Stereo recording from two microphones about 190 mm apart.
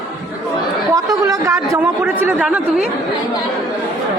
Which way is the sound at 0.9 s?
15° right (ahead or behind).